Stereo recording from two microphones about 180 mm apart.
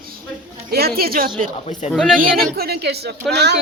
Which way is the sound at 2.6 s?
60° right (ahead or behind).